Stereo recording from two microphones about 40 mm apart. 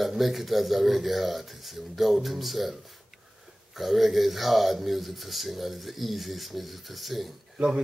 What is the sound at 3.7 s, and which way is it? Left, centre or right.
Speech, centre.